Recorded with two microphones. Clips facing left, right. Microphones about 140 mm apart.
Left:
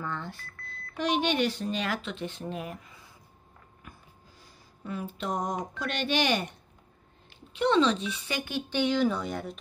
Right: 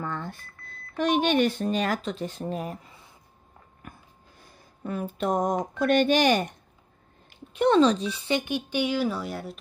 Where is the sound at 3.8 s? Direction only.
50° right (ahead or behind).